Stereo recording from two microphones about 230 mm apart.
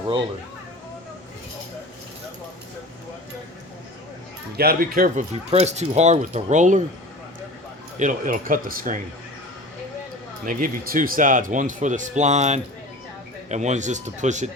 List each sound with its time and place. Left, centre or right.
4.5 s speech: right
7.9 s speech: right
10.4 s speech: right